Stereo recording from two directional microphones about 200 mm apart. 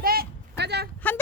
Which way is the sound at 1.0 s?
10° left (ahead or behind).